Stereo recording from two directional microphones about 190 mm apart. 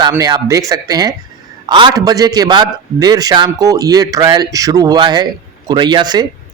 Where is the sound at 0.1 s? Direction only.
20° right (ahead or behind).